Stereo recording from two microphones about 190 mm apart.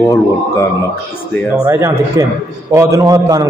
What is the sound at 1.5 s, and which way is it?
A man's voice, 10° right (ahead or behind).